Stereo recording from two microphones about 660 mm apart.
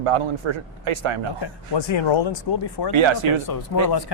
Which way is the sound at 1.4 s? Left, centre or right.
Left.